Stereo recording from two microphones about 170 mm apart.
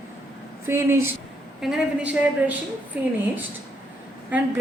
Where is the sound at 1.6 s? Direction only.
5° right (ahead or behind).